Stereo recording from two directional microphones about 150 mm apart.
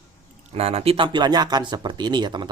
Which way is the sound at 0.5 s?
45° right (ahead or behind).